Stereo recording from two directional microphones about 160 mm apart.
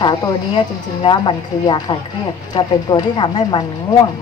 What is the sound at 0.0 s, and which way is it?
Speech, 30° left (ahead or behind).